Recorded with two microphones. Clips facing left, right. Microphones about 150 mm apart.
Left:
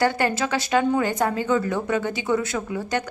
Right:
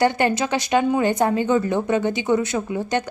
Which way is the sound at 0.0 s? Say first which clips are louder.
Right 3 dB; 20° right (ahead or behind).